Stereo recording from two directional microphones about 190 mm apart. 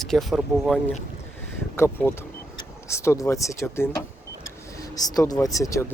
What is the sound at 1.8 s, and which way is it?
Speech, 10° left (ahead or behind).